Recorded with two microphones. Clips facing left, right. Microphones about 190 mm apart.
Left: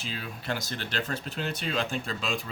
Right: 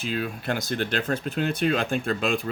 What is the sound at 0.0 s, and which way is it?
Speech, 55° right (ahead or behind).